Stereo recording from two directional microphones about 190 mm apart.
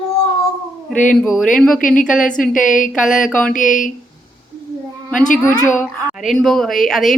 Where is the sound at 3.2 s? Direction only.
Centre (ahead or behind).